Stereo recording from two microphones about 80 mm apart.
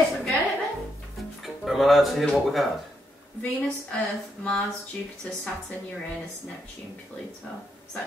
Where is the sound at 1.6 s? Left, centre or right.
Centre.